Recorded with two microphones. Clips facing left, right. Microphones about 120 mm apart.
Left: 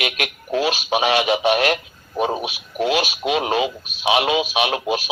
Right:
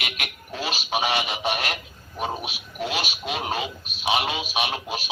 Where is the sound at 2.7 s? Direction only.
85° left.